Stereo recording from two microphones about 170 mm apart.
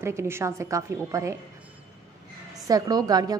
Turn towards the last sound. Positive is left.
turn(degrees=-20)  # may be behind; listen again after turning